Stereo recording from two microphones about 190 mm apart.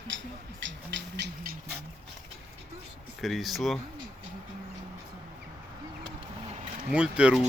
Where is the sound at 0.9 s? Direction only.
65° right (ahead or behind).